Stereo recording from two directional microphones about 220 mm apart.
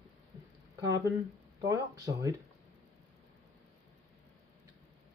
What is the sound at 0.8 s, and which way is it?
Speech, 20° right (ahead or behind).